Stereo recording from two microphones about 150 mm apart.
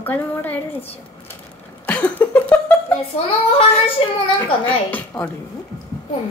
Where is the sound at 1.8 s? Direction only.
10° left (ahead or behind).